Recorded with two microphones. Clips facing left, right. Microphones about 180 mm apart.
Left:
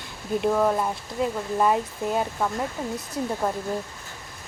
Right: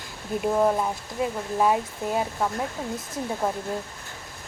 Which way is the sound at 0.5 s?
5° right (ahead or behind).